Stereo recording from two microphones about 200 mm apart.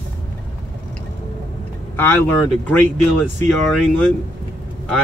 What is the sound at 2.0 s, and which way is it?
Speech, 10° left (ahead or behind).